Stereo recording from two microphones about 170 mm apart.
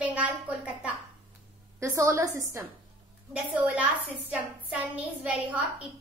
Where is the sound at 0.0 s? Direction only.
10° right (ahead or behind).